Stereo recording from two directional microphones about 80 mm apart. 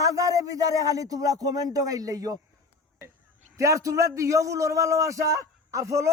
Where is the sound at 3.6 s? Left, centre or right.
Right.